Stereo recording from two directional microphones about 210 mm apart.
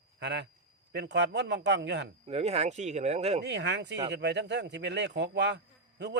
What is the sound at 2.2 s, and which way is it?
Speech, 30° right (ahead or behind).